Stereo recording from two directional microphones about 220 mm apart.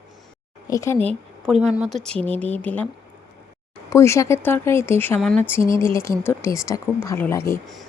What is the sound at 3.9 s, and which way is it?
Speech, 15° left (ahead or behind).